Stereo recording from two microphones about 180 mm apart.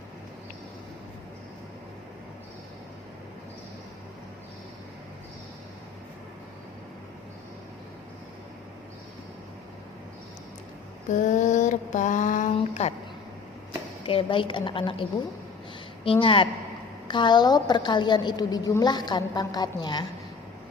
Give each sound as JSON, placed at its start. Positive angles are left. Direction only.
{"t": 11.1, "sound": "mantra", "side_deg": 45}
{"t": 12.5, "sound": "a sound", "side_deg": 35}
{"t": 14.0, "sound": "a woman's voice", "side_deg": 30}
{"t": 16.2, "sound": "a woman's voice", "side_deg": 30}